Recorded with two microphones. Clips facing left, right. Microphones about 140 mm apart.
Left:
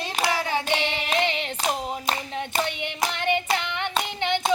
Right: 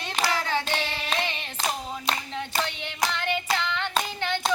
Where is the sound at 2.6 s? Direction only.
15° left (ahead or behind).